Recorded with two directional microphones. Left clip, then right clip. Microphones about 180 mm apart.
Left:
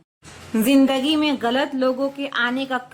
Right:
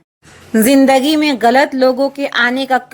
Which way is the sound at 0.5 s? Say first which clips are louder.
Right 8 dB; 25° right (ahead or behind).